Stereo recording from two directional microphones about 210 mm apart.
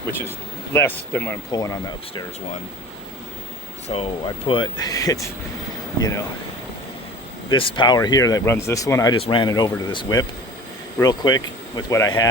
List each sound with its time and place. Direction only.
0.7 s speech: 10° left (ahead or behind)
3.8 s speech: 25° left (ahead or behind)
7.5 s speech: 25° left (ahead or behind)